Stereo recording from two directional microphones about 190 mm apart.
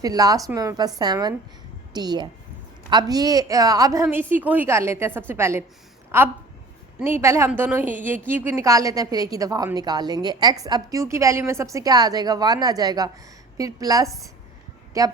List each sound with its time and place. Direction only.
0.0 s a woman's voice: 20° right (ahead or behind)